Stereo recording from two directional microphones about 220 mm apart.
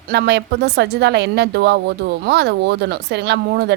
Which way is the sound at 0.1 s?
50° right (ahead or behind).